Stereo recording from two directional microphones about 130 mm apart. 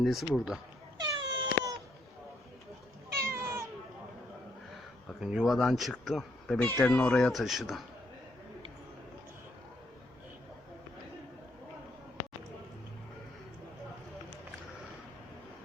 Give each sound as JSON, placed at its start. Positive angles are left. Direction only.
{"t": 0.0, "sound": "speech", "side_deg": 0}
{"t": 0.9, "sound": "a sound", "side_deg": -30}
{"t": 3.1, "sound": "cat", "side_deg": -20}
{"t": 5.2, "sound": "speech", "side_deg": -5}
{"t": 6.6, "sound": "speech", "side_deg": 15}